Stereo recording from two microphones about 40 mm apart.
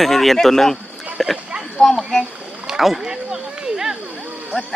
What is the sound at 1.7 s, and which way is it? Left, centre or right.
Speech, centre.